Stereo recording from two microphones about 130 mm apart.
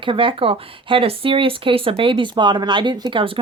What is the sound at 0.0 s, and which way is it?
A woman's voice, 40° right (ahead or behind).